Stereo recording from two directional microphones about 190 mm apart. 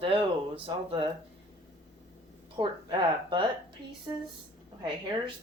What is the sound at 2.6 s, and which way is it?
Speech, 25° right (ahead or behind).